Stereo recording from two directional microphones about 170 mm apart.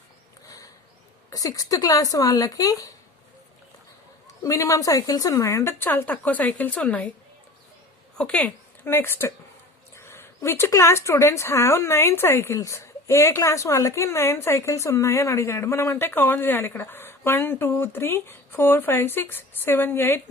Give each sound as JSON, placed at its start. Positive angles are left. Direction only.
{"t": 1.3, "sound": "speech", "side_deg": 20}
{"t": 4.4, "sound": "speech", "side_deg": 20}
{"t": 8.2, "sound": "speech", "side_deg": 10}